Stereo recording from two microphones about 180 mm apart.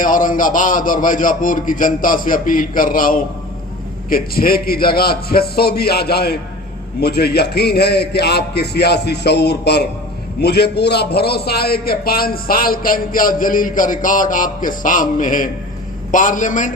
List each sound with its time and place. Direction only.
0.0 s a man's voice: 50° left (ahead or behind)